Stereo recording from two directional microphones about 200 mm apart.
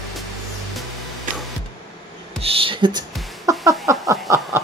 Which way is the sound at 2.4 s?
30° right (ahead or behind).